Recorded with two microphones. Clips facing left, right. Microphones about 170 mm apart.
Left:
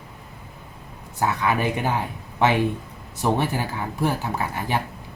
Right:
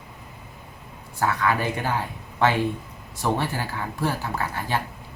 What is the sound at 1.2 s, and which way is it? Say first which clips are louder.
Speech: left 1 dB; 20° left (ahead or behind).